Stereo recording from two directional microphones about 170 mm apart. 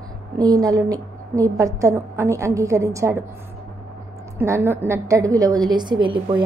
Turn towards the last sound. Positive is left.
turn(degrees=-30)  # may be behind; listen again after turning